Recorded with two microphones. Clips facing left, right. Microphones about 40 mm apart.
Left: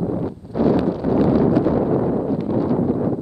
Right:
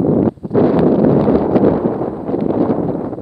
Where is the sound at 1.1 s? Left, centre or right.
Right.